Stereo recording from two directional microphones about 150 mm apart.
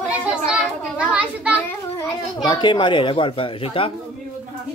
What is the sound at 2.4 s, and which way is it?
A child's voice, 30° left (ahead or behind).